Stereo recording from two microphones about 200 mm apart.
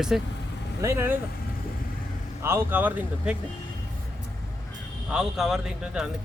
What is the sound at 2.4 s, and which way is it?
Speech, 10° right (ahead or behind).